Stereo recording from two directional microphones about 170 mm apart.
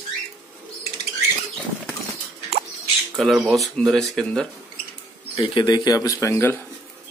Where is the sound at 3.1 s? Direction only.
Centre (ahead or behind).